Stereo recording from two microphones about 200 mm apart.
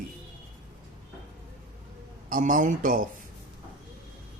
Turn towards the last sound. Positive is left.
turn(degrees=-40)  # may be behind; listen again after turning